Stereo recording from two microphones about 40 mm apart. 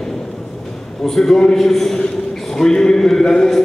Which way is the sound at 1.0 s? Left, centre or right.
Centre.